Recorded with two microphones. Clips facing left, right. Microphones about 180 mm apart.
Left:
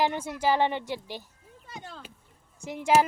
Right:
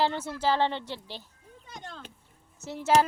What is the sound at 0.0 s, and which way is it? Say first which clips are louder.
Speech: left 1 dB; 15° left (ahead or behind).